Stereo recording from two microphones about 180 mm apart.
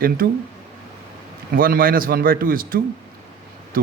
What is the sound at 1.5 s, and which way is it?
A man's voice, 55° right (ahead or behind).